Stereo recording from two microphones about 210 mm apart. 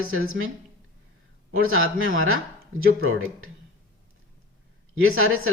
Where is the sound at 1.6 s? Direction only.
75° right (ahead or behind).